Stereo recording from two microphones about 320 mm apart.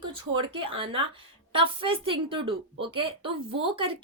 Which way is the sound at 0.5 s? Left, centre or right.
Centre.